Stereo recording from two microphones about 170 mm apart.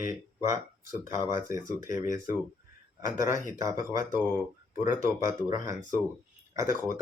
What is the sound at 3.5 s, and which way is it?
Speech, 20° right (ahead or behind).